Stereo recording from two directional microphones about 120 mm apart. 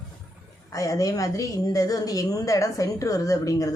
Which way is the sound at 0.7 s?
30° left (ahead or behind).